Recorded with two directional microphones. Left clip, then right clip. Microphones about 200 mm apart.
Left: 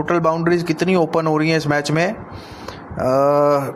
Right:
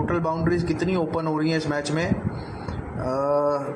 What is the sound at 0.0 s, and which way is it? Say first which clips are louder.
A man's voice: left 7 dB; 45° left (ahead or behind).